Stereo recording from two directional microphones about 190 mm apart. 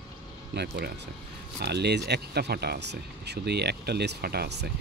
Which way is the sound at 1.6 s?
60° right (ahead or behind).